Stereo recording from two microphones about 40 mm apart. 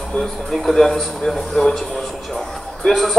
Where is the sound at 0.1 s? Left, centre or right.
Centre.